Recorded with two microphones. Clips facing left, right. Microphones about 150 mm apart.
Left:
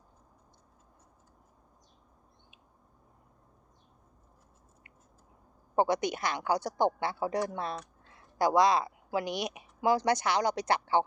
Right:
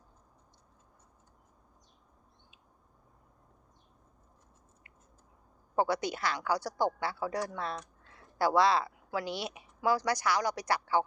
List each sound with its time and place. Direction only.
5.7 s a woman's voice: 20° left (ahead or behind)